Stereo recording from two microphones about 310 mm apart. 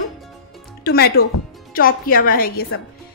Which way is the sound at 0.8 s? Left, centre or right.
Left.